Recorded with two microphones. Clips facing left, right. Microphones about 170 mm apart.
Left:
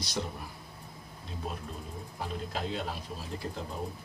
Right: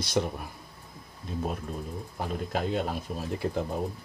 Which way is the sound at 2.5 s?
55° right (ahead or behind).